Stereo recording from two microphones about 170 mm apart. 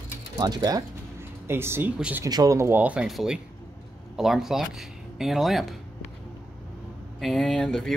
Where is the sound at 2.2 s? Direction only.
20° right (ahead or behind); by 5.7 s centre (ahead or behind).